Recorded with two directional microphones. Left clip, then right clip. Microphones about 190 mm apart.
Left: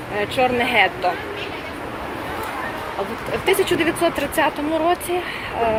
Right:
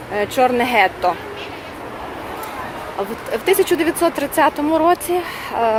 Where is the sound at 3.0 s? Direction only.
35° right (ahead or behind).